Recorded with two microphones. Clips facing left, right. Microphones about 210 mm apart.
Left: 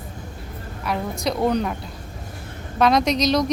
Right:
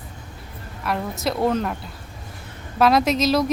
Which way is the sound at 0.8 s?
Centre (ahead or behind).